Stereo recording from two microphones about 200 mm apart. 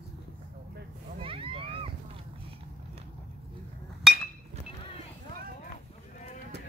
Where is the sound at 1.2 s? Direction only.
25° right (ahead or behind).